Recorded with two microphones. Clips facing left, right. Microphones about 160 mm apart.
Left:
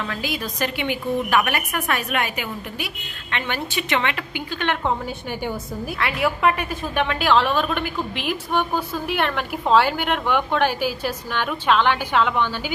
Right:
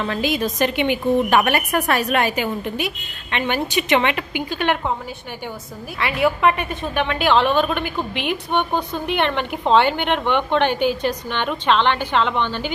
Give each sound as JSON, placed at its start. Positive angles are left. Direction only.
{"t": 0.0, "sound": "a woman's voice", "side_deg": -25}
{"t": 5.9, "sound": "a woman's voice", "side_deg": 0}